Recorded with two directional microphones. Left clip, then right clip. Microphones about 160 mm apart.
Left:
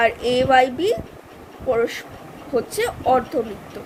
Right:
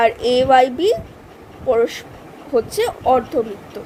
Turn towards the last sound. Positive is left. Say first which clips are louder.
# right 3 dB
turn(degrees=-20)  # may be behind; listen again after turning